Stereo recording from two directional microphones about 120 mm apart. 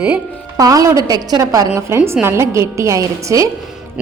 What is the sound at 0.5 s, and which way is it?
A woman's voice, 30° right (ahead or behind).